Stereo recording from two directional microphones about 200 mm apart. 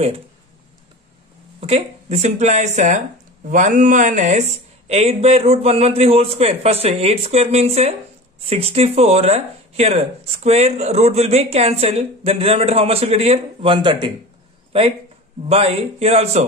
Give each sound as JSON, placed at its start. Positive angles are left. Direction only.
{"t": 1.6, "sound": "speech", "side_deg": -30}
{"t": 15.4, "sound": "speech", "side_deg": -30}